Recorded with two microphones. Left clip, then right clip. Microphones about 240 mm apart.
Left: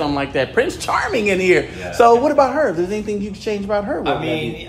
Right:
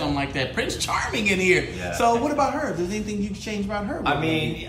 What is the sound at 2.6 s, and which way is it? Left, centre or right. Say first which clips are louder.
A woman's voice: left 9 dB; left.